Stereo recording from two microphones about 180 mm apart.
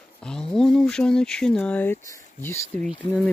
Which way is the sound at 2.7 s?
30° left (ahead or behind).